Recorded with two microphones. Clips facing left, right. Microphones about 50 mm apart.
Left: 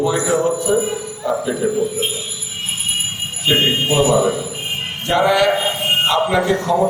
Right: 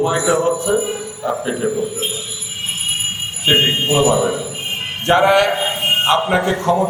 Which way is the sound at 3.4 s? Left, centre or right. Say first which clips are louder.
Right 1 dB; right.